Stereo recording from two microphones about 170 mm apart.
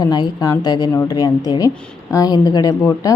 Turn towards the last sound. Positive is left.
turn(degrees=20)  # may be behind; listen again after turning